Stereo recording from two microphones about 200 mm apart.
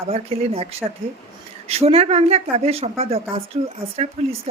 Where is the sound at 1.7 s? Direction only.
30° right (ahead or behind).